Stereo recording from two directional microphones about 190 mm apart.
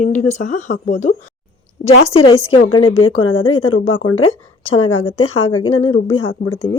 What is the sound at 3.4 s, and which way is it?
Speech, 30° left (ahead or behind).